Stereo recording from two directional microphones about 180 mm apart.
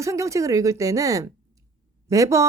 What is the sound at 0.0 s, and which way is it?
Speech, 15° right (ahead or behind).